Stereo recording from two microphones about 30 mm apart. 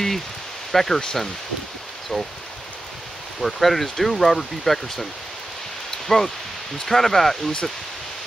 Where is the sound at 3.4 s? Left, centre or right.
Centre.